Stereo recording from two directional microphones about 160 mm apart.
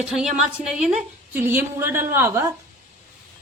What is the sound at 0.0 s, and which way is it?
A woman's voice, 5° right (ahead or behind).